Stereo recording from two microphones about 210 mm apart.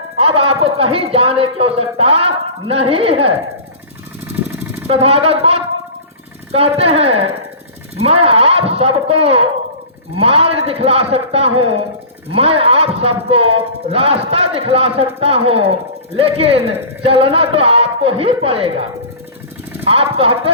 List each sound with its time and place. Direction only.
0.2 s speech: 30° right (ahead or behind)
4.4 s jackhammer: 10° right (ahead or behind)
4.9 s speech: 30° right (ahead or behind)
19.8 s speech: 25° right (ahead or behind)